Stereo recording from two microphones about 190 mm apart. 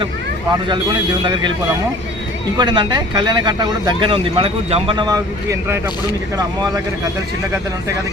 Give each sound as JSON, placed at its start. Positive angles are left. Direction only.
{"t": 2.6, "sound": "speech", "side_deg": -20}